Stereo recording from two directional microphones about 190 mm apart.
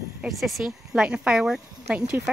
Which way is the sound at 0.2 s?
Centre (ahead or behind).